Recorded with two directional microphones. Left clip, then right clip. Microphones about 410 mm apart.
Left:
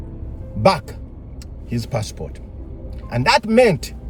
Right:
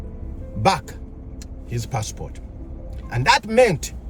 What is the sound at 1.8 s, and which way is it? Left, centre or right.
Speech, centre.